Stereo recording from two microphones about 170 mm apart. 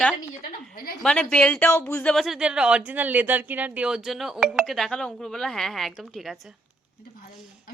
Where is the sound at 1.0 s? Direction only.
10° left (ahead or behind).